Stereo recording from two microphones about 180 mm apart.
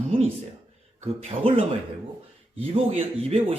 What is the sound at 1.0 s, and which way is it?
A woman's voice, 35° right (ahead or behind).